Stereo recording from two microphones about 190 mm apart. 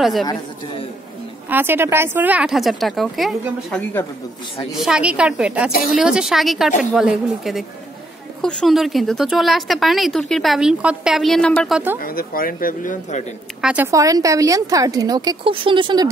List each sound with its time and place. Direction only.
0.0 s a woman's voice: centre (ahead or behind)
1.5 s a woman's voice: 10° right (ahead or behind); by 11.8 s 5° left (ahead or behind)
12.0 s speech: 50° left (ahead or behind)
13.6 s speech: 5° right (ahead or behind)
13.8 s a woman's voice: 15° right (ahead or behind)